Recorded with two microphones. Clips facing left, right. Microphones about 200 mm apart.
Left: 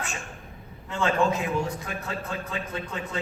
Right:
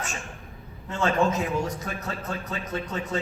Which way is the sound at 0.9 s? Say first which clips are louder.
Even; 40° right (ahead or behind).